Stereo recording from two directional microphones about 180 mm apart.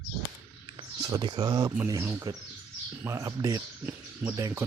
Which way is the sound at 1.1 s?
20° right (ahead or behind).